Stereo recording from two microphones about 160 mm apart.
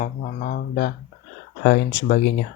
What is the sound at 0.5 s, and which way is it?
Speech, 80° left.